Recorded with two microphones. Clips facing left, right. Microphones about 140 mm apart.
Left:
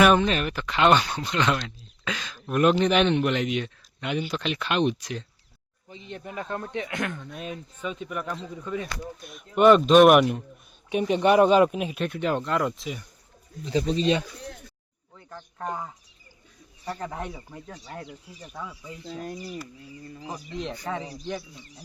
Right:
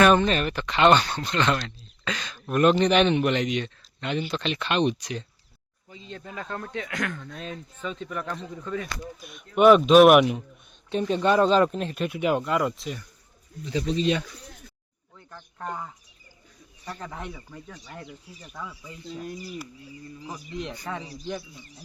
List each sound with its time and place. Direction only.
0.0 s speech: 5° left (ahead or behind)
5.9 s speech: 20° left (ahead or behind)
9.2 s speech: centre (ahead or behind)
10.8 s speech: 15° left (ahead or behind)
12.0 s speech: 10° right (ahead or behind)
13.7 s speech: 35° left (ahead or behind)
15.1 s speech: 10° left (ahead or behind)
17.0 s speech: 10° left (ahead or behind)
17.7 s speech: 35° left (ahead or behind)
18.5 s speech: centre (ahead or behind)
19.0 s speech: 40° left (ahead or behind)
20.6 s speech: centre (ahead or behind)